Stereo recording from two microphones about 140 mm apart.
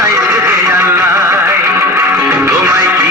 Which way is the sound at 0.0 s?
20° right (ahead or behind).